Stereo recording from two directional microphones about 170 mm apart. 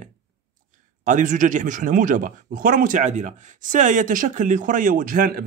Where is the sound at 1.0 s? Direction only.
50° right (ahead or behind).